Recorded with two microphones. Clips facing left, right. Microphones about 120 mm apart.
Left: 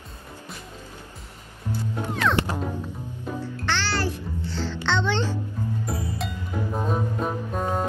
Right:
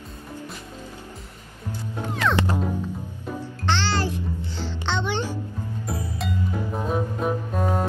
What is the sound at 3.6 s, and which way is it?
Music, 20° right (ahead or behind).